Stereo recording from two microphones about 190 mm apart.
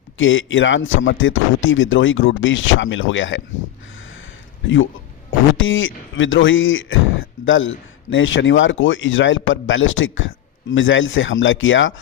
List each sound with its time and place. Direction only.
0.2 s speech: 90° left
5.5 s speech: 90° left